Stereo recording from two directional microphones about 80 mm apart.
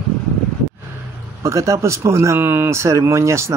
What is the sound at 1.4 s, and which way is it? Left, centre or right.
Speech, right.